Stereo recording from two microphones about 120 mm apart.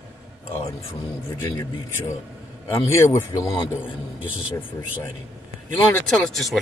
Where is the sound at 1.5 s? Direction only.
25° left (ahead or behind).